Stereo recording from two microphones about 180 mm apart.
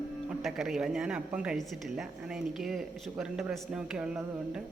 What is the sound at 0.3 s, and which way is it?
A woman's voice, centre (ahead or behind).